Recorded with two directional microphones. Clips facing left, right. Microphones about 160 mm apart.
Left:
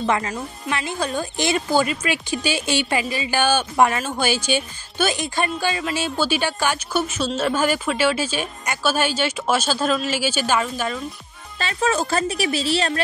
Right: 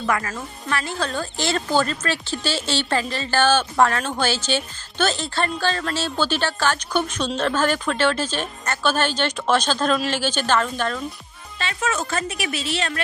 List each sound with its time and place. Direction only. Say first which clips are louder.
0.0 s speech: left 2 dB; 20° left (ahead or behind)
11.5 s speech: left 4 dB; 35° left (ahead or behind)